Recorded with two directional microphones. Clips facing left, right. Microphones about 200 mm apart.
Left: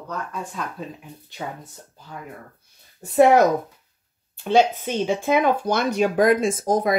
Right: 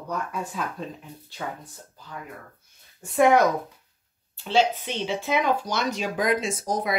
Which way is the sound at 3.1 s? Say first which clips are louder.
Left 4 dB; 40° left (ahead or behind).